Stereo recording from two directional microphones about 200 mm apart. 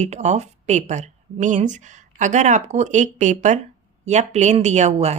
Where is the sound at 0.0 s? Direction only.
35° right (ahead or behind).